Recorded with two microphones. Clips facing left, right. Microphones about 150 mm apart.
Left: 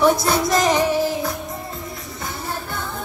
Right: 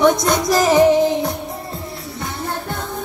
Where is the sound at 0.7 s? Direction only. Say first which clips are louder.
Right 7 dB; 20° right (ahead or behind).